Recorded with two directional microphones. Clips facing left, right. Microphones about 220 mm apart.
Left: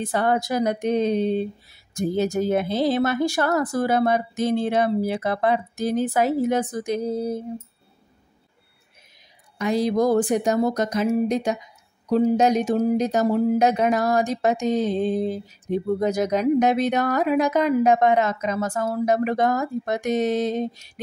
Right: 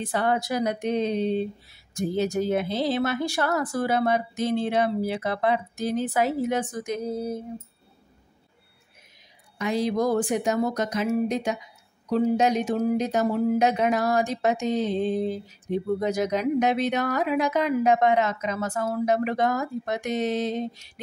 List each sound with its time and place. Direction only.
0.0 s speech: 45° left (ahead or behind)
9.6 s speech: 40° left (ahead or behind)